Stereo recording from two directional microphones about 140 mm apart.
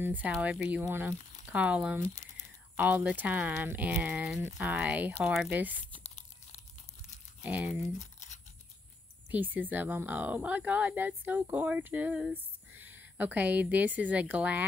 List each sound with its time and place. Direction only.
0.0 s speech: 10° right (ahead or behind)
6.0 s tearing: 50° left (ahead or behind)
7.4 s speech: 10° right (ahead or behind)
8.0 s toothbrush: 55° left (ahead or behind)
9.3 s a woman's voice: 10° right (ahead or behind)